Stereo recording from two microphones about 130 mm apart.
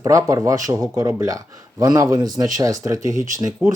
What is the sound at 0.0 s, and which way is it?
Speech, 25° right (ahead or behind).